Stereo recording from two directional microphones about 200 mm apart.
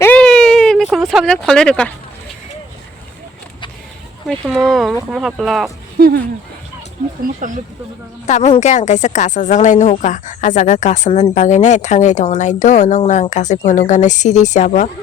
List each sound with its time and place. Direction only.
0.0 s a sound: 5° left (ahead or behind)
4.3 s speech: centre (ahead or behind)
6.0 s speech: 50° right (ahead or behind)
7.2 s speech: 40° right (ahead or behind)
8.3 s speech: 35° left (ahead or behind)